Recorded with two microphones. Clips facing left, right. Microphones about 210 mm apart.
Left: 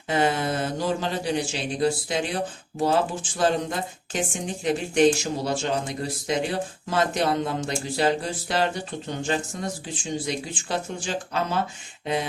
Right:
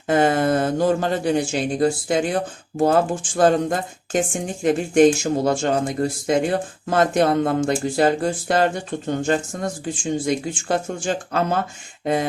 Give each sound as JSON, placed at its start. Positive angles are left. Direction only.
{"t": 0.1, "sound": "speech", "side_deg": -50}